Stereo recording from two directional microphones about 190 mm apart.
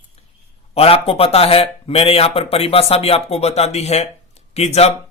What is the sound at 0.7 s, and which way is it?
Speech, 30° left (ahead or behind).